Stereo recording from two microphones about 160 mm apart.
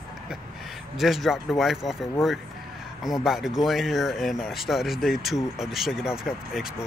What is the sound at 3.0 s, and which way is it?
Speech, centre (ahead or behind).